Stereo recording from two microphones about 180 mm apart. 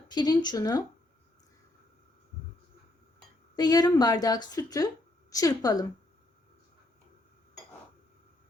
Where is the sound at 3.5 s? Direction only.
20° left (ahead or behind).